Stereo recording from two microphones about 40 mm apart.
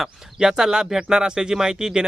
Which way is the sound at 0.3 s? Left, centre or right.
Centre.